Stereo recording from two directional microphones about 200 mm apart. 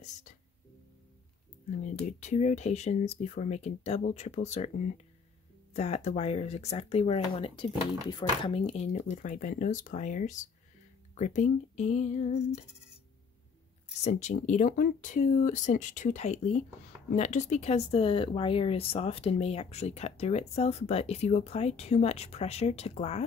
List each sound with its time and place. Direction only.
1.7 s speech: 35° left (ahead or behind)
14.0 s speech: 35° left (ahead or behind)